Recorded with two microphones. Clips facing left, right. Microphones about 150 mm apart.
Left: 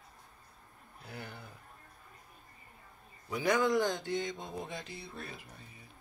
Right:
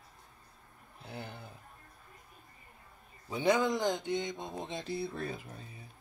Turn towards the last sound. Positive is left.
turn(degrees=-35)  # may be behind; listen again after turning